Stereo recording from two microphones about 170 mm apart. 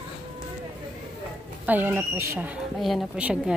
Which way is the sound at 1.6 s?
10° right (ahead or behind).